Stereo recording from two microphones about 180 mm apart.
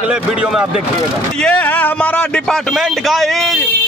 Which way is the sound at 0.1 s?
5° right (ahead or behind).